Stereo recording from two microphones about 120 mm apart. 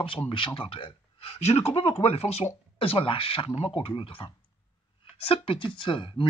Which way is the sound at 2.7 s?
50° left (ahead or behind).